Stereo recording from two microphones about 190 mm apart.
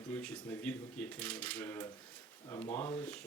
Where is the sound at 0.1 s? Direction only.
10° left (ahead or behind).